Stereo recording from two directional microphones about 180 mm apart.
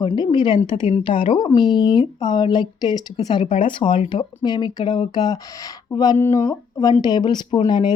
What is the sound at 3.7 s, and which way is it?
Speech, 25° left (ahead or behind).